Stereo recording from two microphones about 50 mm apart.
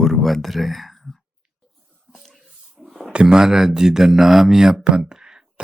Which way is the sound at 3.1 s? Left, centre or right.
Centre.